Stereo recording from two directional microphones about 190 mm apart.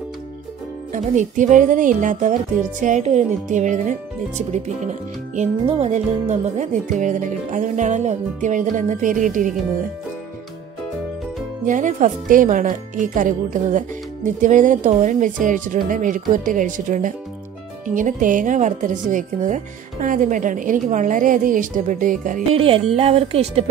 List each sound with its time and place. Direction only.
0.9 s a woman's voice: 40° right (ahead or behind)
5.3 s speech: 35° right (ahead or behind)
11.6 s a woman's voice: 40° right (ahead or behind)
22.5 s speech: 30° right (ahead or behind)